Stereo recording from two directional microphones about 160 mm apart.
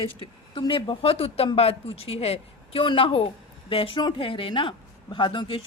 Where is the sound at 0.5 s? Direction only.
30° left (ahead or behind).